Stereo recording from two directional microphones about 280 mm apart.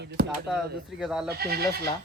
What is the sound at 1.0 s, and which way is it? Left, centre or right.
Speech, centre.